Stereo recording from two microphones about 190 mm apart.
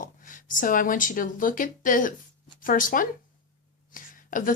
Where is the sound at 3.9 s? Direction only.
45° left (ahead or behind).